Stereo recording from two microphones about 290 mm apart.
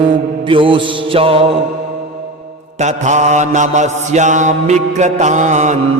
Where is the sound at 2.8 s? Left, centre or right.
Right.